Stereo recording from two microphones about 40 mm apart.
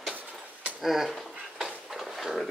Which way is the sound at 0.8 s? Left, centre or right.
Centre.